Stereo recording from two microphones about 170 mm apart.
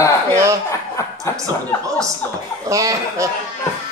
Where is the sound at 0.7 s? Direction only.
15° left (ahead or behind).